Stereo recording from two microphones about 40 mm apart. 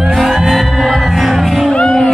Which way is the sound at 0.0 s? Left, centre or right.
Centre.